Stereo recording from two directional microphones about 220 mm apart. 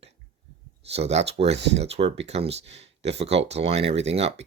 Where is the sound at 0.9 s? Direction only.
30° right (ahead or behind).